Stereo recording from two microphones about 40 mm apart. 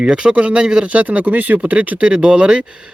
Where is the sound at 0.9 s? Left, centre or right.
Right.